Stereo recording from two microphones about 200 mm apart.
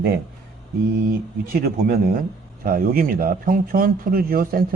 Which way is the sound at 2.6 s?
45° right (ahead or behind).